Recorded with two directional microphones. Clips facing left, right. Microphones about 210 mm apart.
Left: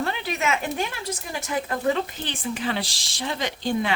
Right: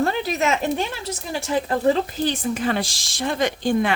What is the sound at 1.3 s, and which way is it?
Speech, 30° right (ahead or behind).